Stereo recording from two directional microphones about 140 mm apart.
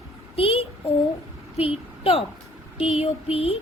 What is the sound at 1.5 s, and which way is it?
A child's voice, 45° left (ahead or behind).